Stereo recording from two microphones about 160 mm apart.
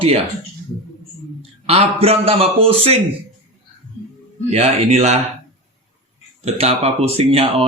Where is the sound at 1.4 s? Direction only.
40° right (ahead or behind).